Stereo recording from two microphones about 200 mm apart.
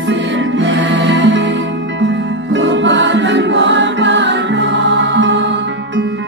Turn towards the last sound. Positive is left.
turn(degrees=-65)  # may be behind; listen again after turning